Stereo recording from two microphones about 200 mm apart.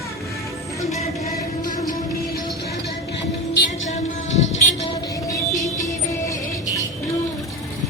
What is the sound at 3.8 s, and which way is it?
Music, 35° left (ahead or behind).